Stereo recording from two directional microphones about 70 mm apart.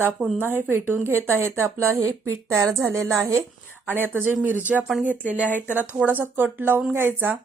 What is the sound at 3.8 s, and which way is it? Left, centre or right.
Speech, right.